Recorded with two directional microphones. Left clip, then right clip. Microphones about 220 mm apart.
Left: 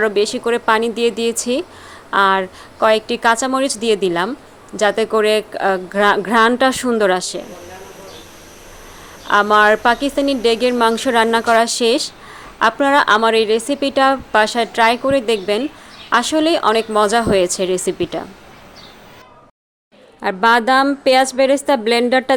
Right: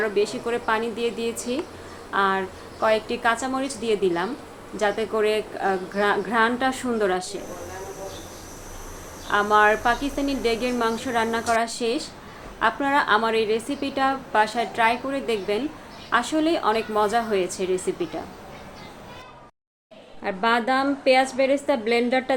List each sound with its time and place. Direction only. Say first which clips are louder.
0.0 s a woman's voice: left 7 dB; 50° left (ahead or behind)
9.2 s a woman's voice: left 7 dB; 45° left (ahead or behind)
20.2 s a woman's voice: left 9 dB; 55° left (ahead or behind)